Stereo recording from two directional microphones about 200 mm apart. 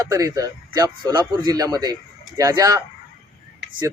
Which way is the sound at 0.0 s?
15° right (ahead or behind).